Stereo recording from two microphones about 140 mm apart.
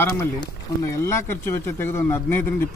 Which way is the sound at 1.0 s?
20° left (ahead or behind).